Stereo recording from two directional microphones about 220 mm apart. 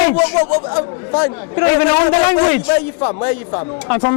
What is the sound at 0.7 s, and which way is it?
Speech, 25° left (ahead or behind).